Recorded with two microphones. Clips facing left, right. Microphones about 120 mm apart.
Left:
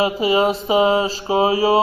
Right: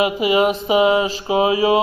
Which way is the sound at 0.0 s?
35° left (ahead or behind).